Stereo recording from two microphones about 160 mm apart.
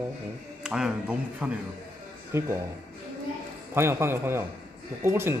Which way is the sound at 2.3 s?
15° right (ahead or behind).